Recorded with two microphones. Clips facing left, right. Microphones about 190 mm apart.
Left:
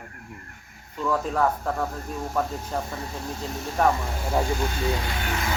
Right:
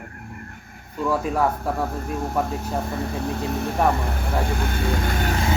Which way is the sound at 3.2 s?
60° right (ahead or behind).